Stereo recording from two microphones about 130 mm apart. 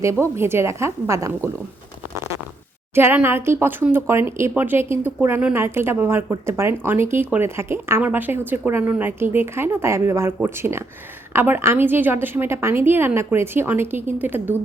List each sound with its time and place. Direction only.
0.0 s a woman's voice: 20° right (ahead or behind)
2.1 s stomach rumble: 20° right (ahead or behind)
2.9 s speech: 15° right (ahead or behind)